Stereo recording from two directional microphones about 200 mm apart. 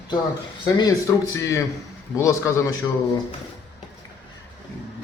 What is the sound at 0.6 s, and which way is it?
Speech, 20° left (ahead or behind).